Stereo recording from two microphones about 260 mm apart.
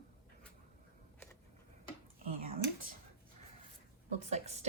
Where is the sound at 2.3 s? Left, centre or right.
Right.